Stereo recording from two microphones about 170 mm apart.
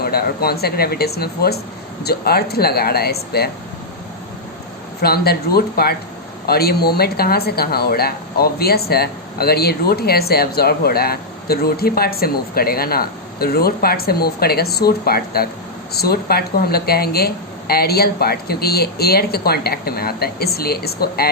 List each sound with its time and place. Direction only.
0.0 s speech: 65° left (ahead or behind)
4.9 s speech: 65° left (ahead or behind)